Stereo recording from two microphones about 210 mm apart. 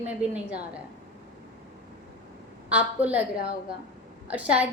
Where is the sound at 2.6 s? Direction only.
5° right (ahead or behind).